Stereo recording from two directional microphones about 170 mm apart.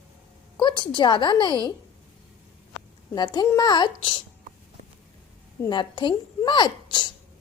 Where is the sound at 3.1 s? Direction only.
25° left (ahead or behind).